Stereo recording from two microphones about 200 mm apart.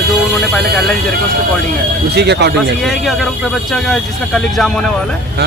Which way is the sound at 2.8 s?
Centre (ahead or behind).